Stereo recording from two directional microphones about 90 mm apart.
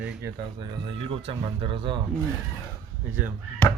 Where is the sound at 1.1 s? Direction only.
75° right (ahead or behind).